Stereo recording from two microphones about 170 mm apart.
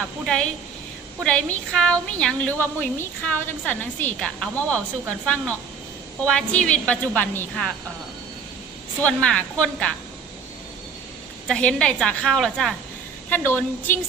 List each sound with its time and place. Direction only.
0.3 s a woman's voice: 5° left (ahead or behind)
9.0 s a woman's voice: 5° left (ahead or behind)
11.4 s a woman's voice: 5° left (ahead or behind)